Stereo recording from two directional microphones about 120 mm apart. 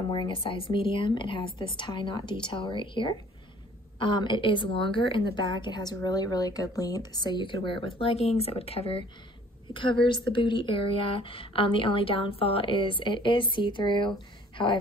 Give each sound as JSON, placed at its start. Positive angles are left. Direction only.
{"t": 0.1, "sound": "a woman's voice", "side_deg": 45}
{"t": 9.8, "sound": "a woman's voice", "side_deg": 45}